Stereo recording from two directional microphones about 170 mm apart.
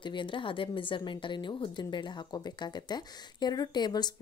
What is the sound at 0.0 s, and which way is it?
A woman's voice, 30° left (ahead or behind).